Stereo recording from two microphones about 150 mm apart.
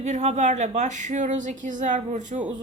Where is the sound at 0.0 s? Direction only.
50° right (ahead or behind).